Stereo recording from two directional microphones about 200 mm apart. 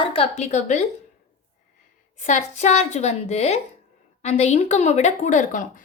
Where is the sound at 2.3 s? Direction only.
35° left (ahead or behind).